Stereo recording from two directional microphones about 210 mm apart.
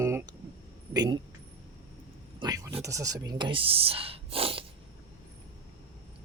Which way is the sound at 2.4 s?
15° right (ahead or behind).